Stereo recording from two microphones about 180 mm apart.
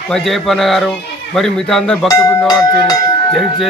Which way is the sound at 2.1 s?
20° left (ahead or behind).